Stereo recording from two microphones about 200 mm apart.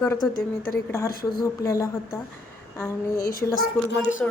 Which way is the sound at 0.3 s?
45° left (ahead or behind).